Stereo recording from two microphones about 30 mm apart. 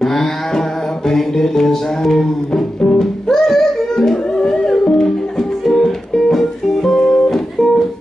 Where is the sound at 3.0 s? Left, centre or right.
Centre.